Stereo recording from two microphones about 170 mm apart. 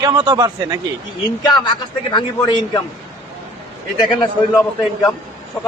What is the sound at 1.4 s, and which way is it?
A man's voice, 25° left (ahead or behind).